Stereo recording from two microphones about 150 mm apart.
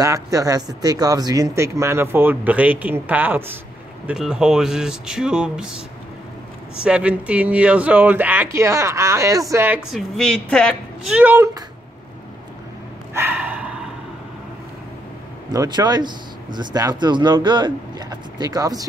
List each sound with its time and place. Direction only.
0.0 s speech: 20° right (ahead or behind); by 5.7 s 5° right (ahead or behind)
6.8 s speech: 5° right (ahead or behind)
9.8 s speech: centre (ahead or behind)
11.1 s speech: 10° right (ahead or behind)
13.1 s snort: 15° right (ahead or behind)
15.5 s speech: 25° right (ahead or behind)